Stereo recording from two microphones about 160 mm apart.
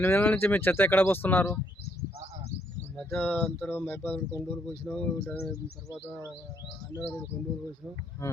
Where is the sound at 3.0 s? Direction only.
10° left (ahead or behind).